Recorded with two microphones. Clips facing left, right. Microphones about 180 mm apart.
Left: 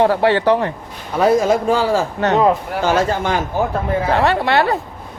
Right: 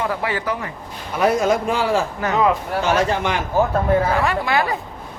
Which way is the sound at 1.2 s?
30° left (ahead or behind).